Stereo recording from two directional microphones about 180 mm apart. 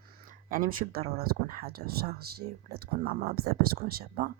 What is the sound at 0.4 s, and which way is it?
Speech, 50° right (ahead or behind).